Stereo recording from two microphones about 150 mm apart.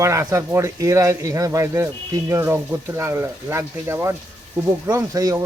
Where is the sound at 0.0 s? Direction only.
20° right (ahead or behind).